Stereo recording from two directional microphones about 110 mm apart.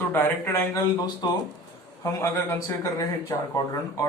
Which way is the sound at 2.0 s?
25° left (ahead or behind).